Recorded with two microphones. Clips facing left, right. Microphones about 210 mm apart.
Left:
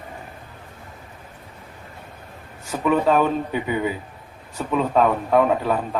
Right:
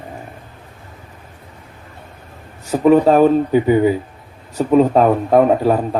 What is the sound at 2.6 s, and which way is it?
Speech, 40° right (ahead or behind).